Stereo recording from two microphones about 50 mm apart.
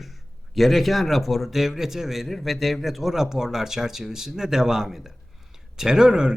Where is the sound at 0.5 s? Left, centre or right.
Centre.